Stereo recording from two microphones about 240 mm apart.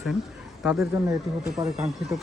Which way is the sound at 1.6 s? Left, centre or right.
Centre.